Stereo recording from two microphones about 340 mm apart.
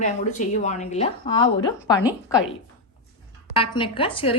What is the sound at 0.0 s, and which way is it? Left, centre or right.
A woman's voice, left.